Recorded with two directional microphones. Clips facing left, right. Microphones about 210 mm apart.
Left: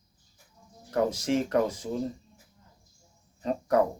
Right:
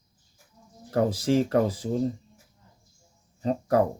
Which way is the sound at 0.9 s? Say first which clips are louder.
Right 3 dB; 30° right (ahead or behind).